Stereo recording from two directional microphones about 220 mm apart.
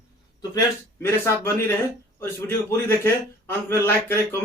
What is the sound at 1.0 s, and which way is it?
A man's voice, 10° left (ahead or behind).